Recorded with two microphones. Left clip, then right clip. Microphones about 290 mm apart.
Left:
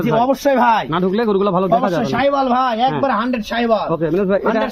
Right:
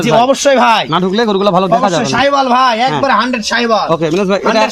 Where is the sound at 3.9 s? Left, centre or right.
Right.